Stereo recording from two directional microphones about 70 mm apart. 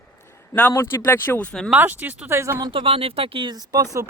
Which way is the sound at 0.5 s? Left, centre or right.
Left.